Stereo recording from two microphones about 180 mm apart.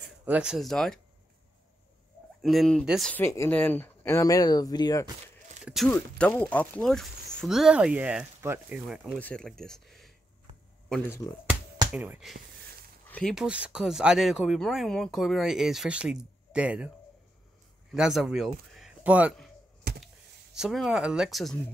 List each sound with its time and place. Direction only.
0.2 s speech: 5° right (ahead or behind)
2.4 s speech: centre (ahead or behind)
3.1 s speech: 10° left (ahead or behind)
5.9 s speech: 10° left (ahead or behind)
9.2 s speech: 5° left (ahead or behind)
11.9 s speech: 5° right (ahead or behind)
17.9 s speech: centre (ahead or behind)
20.5 s speech: centre (ahead or behind)